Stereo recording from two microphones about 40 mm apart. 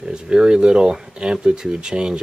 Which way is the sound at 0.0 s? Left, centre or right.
Right.